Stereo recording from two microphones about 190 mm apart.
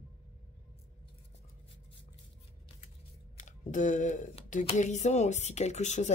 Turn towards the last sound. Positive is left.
turn(degrees=40)  # may be behind; listen again after turning